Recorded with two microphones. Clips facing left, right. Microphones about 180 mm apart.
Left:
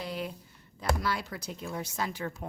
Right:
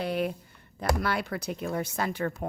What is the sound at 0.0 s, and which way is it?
Speech, 60° right (ahead or behind).